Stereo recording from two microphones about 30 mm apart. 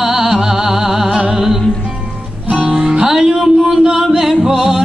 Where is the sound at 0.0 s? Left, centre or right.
Centre.